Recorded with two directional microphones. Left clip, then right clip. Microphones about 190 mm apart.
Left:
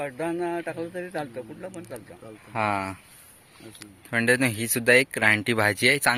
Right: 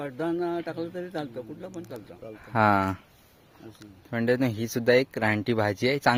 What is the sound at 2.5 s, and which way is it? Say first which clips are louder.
Speech: right 4 dB; 65° right (ahead or behind).